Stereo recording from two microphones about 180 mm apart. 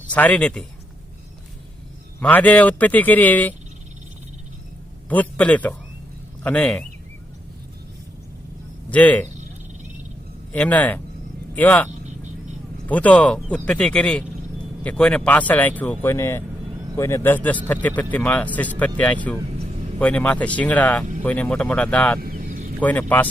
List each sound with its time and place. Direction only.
0.1 s speech: 10° left (ahead or behind)
2.2 s speech: 10° left (ahead or behind)
5.0 s speech: 10° left (ahead or behind)
8.9 s speech: 10° left (ahead or behind)
10.5 s speech: 10° left (ahead or behind)
11.9 s vehicle: 40° right (ahead or behind)
12.9 s speech: 10° left (ahead or behind)
22.2 s vehicle: 55° right (ahead or behind)
22.8 s speech: 10° left (ahead or behind)